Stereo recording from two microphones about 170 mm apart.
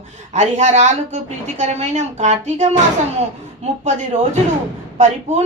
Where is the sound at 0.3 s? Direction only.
45° right (ahead or behind).